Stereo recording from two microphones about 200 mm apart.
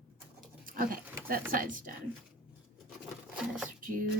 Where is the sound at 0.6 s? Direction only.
45° right (ahead or behind).